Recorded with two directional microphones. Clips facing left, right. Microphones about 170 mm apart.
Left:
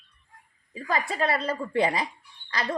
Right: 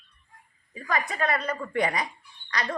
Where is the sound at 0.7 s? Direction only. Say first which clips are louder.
Left 1 dB; 25° left (ahead or behind).